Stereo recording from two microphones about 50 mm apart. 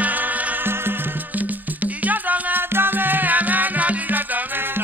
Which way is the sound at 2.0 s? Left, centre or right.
Right.